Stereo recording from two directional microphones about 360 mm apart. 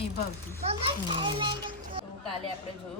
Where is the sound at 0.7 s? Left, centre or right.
Centre.